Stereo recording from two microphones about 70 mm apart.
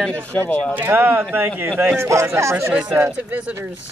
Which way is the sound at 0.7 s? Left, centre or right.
Right.